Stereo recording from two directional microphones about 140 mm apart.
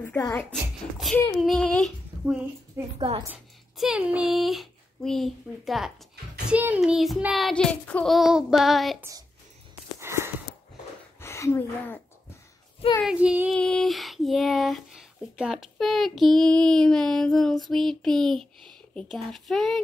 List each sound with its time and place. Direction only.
0.2 s a child's voice: 15° left (ahead or behind)
0.5 s speech: centre (ahead or behind)
2.8 s a woman's voice: 15° right (ahead or behind)
3.7 s speech: 5° right (ahead or behind)
9.9 s wheeze: 20° right (ahead or behind)
11.1 s speech: 20° left (ahead or behind)
13.0 s child singing: 5° right (ahead or behind)
13.6 s speech: 5° left (ahead or behind)